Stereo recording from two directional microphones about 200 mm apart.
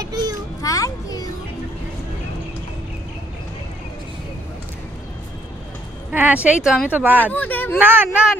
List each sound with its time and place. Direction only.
0.0 s a sound: 20° right (ahead or behind)
0.6 s children playing: 15° left (ahead or behind)
6.1 s speech: 10° right (ahead or behind)
7.3 s speech: 10° left (ahead or behind)
7.8 s speech: 10° right (ahead or behind)